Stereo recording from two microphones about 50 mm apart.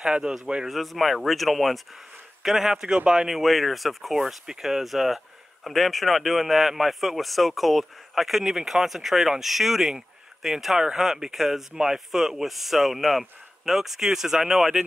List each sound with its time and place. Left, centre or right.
0.0 s speech: centre
0.7 s speech: centre
3.3 s speech: centre